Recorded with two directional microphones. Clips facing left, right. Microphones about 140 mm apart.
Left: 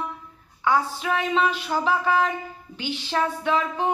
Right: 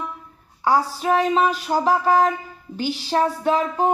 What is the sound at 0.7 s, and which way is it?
Speech, 40° right (ahead or behind).